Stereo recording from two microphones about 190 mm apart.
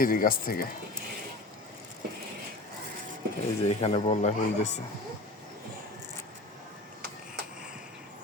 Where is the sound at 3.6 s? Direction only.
30° left (ahead or behind).